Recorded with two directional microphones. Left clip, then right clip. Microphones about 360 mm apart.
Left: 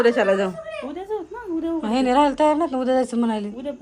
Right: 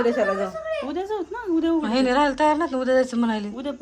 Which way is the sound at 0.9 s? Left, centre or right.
Right.